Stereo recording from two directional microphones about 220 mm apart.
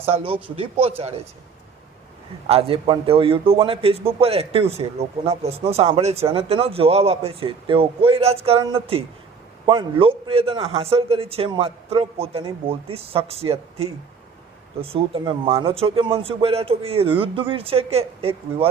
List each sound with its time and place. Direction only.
0.1 s a man's voice: 25° right (ahead or behind)
2.5 s a man's voice: 25° right (ahead or behind)